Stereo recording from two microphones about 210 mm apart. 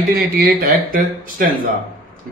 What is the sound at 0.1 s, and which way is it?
A man's voice, 40° right (ahead or behind).